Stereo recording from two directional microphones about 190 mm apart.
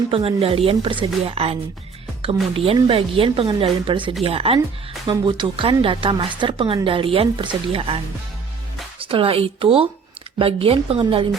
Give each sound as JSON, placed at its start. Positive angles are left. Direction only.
{"t": 0.1, "sound": "speech", "side_deg": -30}
{"t": 9.0, "sound": "speech", "side_deg": -30}